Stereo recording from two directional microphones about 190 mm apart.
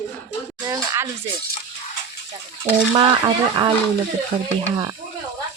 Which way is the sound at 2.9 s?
25° right (ahead or behind).